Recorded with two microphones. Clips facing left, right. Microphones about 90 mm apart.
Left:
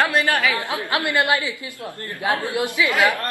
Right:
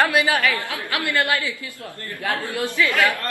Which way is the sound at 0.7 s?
25° left (ahead or behind).